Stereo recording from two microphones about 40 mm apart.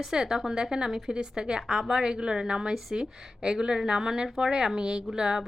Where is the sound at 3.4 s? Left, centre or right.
Right.